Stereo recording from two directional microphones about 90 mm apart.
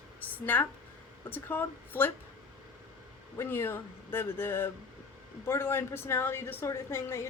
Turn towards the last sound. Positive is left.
turn(degrees=30)  # may be behind; listen again after turning